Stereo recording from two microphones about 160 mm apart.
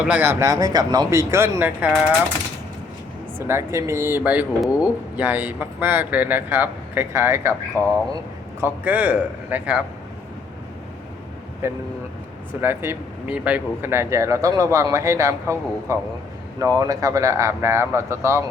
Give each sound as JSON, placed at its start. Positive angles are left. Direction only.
{"t": 0.0, "sound": "speech", "side_deg": -10}
{"t": 3.3, "sound": "speech", "side_deg": -15}
{"t": 7.8, "sound": "speech", "side_deg": 15}
{"t": 8.6, "sound": "speech", "side_deg": -10}
{"t": 11.6, "sound": "speech", "side_deg": -15}